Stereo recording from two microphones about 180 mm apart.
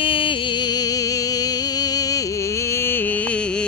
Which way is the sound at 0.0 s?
30° left (ahead or behind).